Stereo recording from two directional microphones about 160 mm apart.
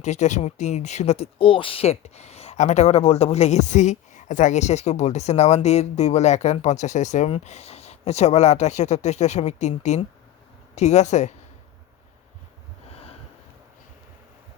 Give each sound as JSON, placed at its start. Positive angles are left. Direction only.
{"t": 0.0, "sound": "speech", "side_deg": 45}